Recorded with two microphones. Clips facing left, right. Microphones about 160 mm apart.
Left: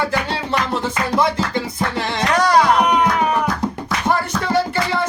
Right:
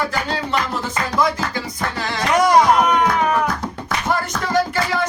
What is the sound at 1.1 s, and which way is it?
Music, 25° left (ahead or behind).